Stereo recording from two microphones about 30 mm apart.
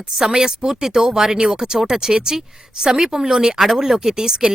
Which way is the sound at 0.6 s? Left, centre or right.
Centre.